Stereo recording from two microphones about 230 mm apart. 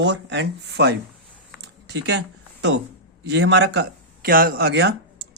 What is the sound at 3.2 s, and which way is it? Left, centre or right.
Speech, right.